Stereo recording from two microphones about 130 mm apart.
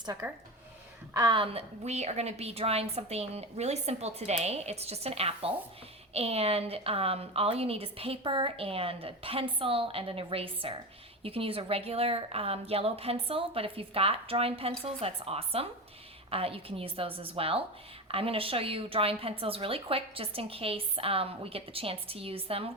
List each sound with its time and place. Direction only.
0.2 s speech: 20° right (ahead or behind)
1.1 s a woman's voice: 35° right (ahead or behind)